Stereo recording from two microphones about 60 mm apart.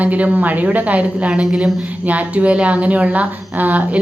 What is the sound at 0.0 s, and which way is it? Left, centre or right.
A woman's voice, right.